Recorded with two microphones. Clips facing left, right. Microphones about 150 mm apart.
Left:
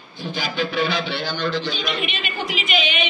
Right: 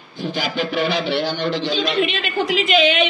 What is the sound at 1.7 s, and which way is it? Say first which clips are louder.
A woman's voice: right 6 dB; 90° right.